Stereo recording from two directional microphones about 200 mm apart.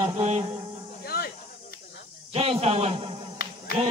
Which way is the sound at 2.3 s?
30° right (ahead or behind).